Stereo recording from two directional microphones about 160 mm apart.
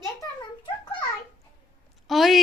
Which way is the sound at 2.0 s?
Centre (ahead or behind).